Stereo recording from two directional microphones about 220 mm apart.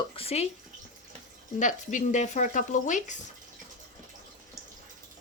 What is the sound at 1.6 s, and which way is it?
Speech, 35° left (ahead or behind).